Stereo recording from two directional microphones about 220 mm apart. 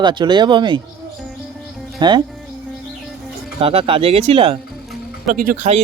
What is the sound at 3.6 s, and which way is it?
Speech, 25° right (ahead or behind).